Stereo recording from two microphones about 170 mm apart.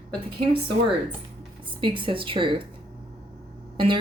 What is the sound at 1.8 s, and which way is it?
Speech, 30° right (ahead or behind).